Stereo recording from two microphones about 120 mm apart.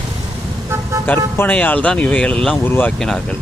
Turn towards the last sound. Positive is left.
turn(degrees=5)  # may be behind; listen again after turning